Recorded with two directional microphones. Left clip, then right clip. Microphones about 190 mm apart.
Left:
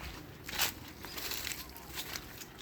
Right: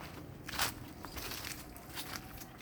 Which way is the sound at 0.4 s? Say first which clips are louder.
Left 2 dB; 10° left (ahead or behind).